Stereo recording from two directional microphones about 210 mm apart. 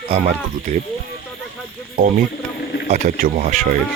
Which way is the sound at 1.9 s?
40° right (ahead or behind).